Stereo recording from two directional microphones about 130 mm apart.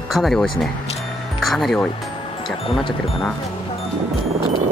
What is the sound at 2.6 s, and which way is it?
Speech, 45° left (ahead or behind).